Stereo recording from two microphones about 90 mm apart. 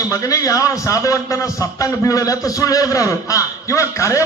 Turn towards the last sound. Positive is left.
turn(degrees=35)  # may be behind; listen again after turning